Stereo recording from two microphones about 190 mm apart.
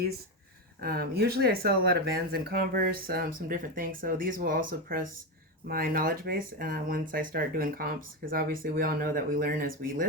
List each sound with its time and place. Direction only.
0.8 s speech: 55° right (ahead or behind)